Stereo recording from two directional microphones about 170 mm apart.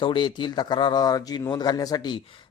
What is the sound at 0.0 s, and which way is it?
A man's voice, 30° left (ahead or behind).